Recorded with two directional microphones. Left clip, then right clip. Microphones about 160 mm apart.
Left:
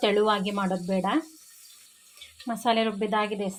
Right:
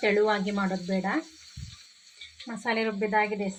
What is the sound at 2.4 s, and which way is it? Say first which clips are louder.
Speech: left 4 dB; 50° left (ahead or behind).